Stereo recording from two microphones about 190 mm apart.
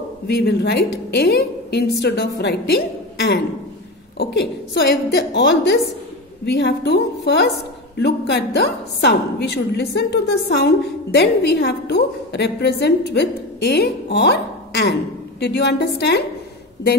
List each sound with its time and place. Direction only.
0.3 s a woman's voice: 60° left (ahead or behind)